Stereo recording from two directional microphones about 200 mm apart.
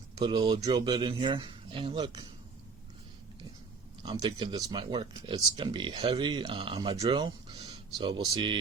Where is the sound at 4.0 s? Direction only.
25° right (ahead or behind).